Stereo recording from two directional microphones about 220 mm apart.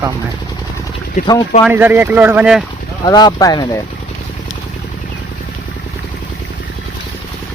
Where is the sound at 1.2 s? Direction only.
35° left (ahead or behind).